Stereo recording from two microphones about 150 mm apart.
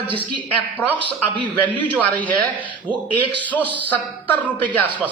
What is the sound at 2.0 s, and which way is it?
Speech, 10° left (ahead or behind).